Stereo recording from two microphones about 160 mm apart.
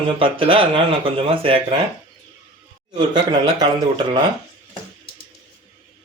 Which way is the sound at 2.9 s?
30° right (ahead or behind).